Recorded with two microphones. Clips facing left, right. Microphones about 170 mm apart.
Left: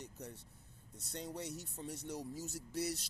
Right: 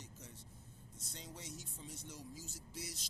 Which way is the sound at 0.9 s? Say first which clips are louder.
Left 9 dB; 65° left (ahead or behind).